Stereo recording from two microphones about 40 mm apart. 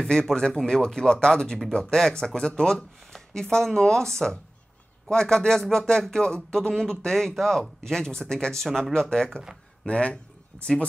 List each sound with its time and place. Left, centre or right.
0.1 s speech: centre
9.8 s speech: left